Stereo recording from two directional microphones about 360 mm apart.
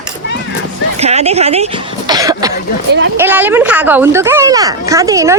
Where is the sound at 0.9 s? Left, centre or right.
Centre.